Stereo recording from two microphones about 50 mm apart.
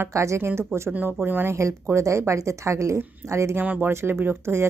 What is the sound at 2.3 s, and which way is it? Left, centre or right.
A woman's voice, right.